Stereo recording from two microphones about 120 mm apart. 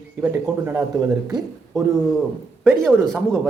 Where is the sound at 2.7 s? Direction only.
5° left (ahead or behind).